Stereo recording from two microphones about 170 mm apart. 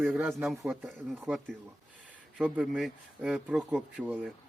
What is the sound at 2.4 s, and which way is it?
Speech, 5° right (ahead or behind).